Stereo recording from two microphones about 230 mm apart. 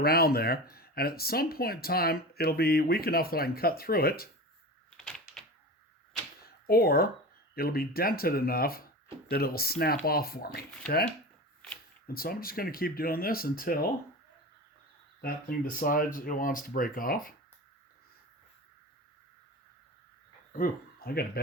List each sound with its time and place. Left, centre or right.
0.0 s speech: left
4.9 s door: centre
6.4 s a sound: left
7.5 s speech: left
12.0 s speech: left
15.2 s speech: left
20.5 s speech: left